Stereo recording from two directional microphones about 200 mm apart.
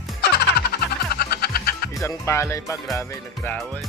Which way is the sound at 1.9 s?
15° left (ahead or behind).